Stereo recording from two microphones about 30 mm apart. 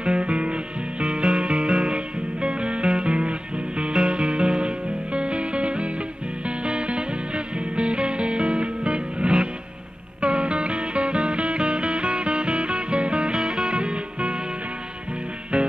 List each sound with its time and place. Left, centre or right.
0.0 s music: right
13.3 s music: centre
13.7 s music: right
15.5 s music: right